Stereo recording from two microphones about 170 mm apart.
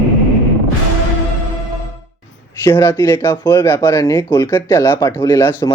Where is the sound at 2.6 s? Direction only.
20° left (ahead or behind).